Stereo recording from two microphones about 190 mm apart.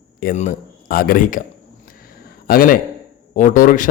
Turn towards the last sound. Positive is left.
turn(degrees=45)  # may be behind; listen again after turning